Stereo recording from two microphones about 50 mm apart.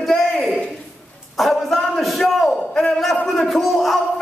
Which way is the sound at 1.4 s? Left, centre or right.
Centre.